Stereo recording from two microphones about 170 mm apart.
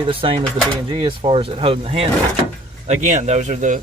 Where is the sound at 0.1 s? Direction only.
30° right (ahead or behind).